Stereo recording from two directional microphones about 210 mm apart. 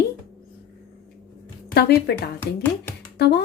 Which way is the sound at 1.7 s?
50° left (ahead or behind).